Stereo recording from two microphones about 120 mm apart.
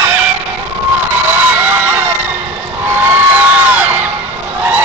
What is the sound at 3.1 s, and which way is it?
Crowd, 15° right (ahead or behind).